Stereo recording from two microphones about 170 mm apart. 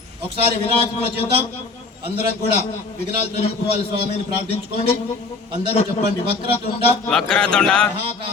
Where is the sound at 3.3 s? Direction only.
40° left (ahead or behind).